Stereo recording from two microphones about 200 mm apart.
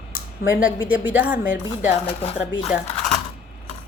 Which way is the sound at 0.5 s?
10° right (ahead or behind).